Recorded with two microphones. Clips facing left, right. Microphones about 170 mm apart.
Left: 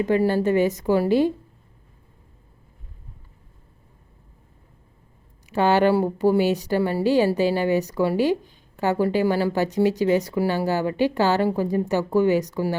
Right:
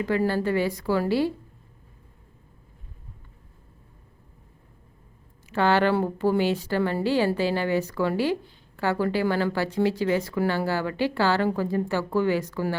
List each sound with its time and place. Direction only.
0.0 s a woman's voice: 20° left (ahead or behind)
5.5 s a woman's voice: 15° left (ahead or behind)